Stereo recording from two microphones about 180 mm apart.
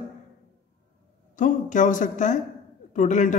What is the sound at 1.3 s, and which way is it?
A woman's voice, 45° left (ahead or behind).